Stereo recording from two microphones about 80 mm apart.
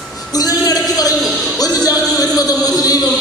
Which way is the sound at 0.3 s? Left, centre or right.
Left.